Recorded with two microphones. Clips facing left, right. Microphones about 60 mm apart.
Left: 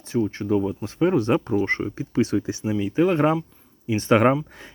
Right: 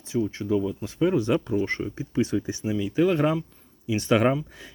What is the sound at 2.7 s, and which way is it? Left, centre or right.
Speech, left.